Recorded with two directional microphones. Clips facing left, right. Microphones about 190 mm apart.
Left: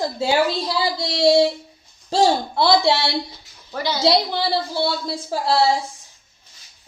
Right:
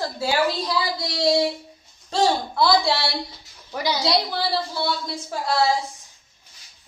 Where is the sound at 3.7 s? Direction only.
15° right (ahead or behind).